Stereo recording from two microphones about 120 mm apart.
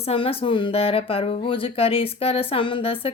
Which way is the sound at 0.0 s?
55° left (ahead or behind).